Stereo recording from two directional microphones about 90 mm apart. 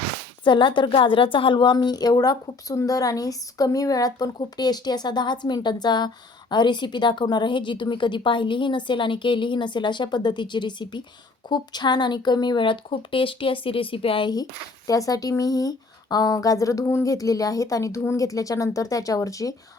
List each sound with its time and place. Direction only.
0.4 s a woman's voice: 65° left (ahead or behind); by 14.3 s 85° left
14.8 s speech: 40° left (ahead or behind)